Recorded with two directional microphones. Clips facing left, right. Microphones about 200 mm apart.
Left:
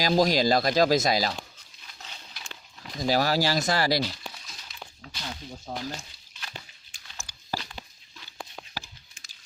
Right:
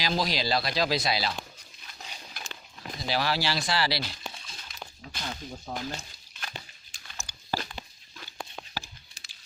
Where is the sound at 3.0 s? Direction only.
45° left (ahead or behind).